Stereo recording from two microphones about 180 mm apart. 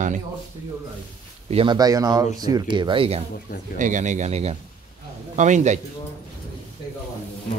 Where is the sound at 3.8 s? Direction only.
40° right (ahead or behind).